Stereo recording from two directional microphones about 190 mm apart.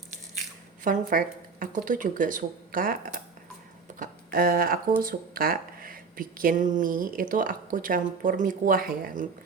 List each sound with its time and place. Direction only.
0.9 s speech: 45° right (ahead or behind)